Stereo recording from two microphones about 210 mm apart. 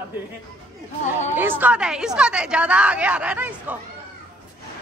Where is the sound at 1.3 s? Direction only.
10° right (ahead or behind).